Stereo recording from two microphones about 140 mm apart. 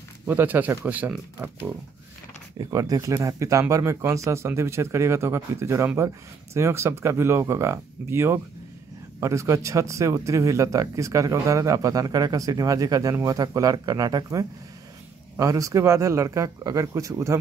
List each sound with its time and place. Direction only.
0.3 s speech: 10° right (ahead or behind)
2.6 s speech: 25° right (ahead or behind)